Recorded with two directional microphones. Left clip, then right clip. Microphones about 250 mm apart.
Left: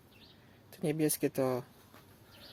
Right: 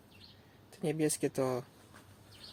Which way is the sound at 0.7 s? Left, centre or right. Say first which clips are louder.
Left 1 dB; centre.